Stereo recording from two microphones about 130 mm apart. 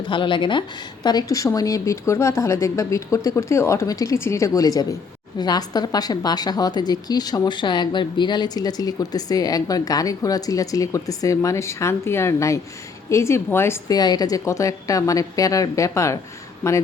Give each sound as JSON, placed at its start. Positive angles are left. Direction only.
{"t": 0.1, "sound": "a woman's voice", "side_deg": 40}